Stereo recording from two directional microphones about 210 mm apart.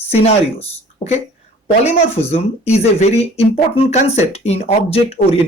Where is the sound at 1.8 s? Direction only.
30° left (ahead or behind).